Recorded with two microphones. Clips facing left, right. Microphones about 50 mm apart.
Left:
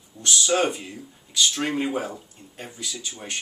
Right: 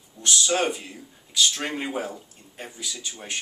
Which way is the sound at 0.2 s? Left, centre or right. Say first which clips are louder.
Left 1 dB; centre.